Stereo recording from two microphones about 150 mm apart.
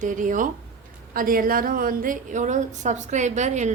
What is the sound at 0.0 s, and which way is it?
A woman's voice, 60° right (ahead or behind).